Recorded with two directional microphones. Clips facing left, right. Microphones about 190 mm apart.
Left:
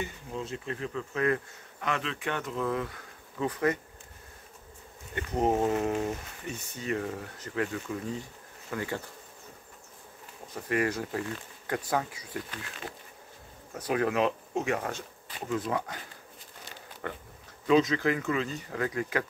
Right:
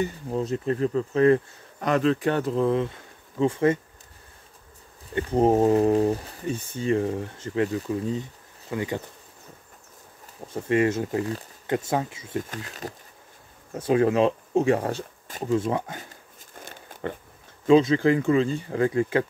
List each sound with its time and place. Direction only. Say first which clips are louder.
0.0 s speech: right 9 dB; 40° right (ahead or behind)
5.1 s speech: right 7 dB; 30° right (ahead or behind)
7.7 s speech: right 7 dB; 35° right (ahead or behind)
8.1 s speech: right 7 dB; 20° right (ahead or behind)
10.5 s speech: right 7 dB; 25° right (ahead or behind)
12.4 s speech: right 5 dB; 40° right (ahead or behind)
13.7 s speech: right 7 dB; 25° right (ahead or behind)
15.3 s speech: right 7 dB; 45° right (ahead or behind)
16.5 s pig: right 6 dB; 50° right (ahead or behind)
17.6 s speech: right 6 dB; 30° right (ahead or behind)